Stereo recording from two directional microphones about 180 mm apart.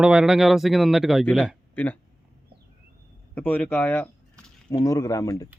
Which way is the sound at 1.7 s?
10° left (ahead or behind).